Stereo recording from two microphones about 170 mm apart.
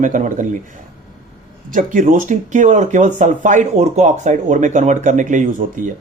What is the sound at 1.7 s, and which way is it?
Speech, 50° right (ahead or behind).